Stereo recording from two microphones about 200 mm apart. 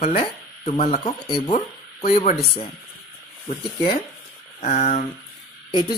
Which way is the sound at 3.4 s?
30° left (ahead or behind).